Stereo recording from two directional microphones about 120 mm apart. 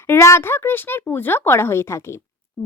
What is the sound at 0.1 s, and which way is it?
Speech, 20° left (ahead or behind).